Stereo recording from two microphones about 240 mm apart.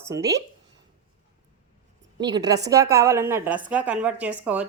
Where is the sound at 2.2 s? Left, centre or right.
Centre.